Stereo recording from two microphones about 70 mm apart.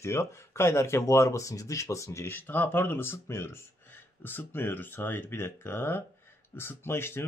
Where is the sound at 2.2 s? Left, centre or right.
Left.